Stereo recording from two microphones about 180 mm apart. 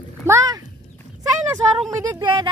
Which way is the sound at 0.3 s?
20° right (ahead or behind).